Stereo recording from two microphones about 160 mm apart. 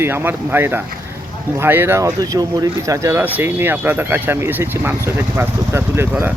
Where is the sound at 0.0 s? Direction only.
15° right (ahead or behind).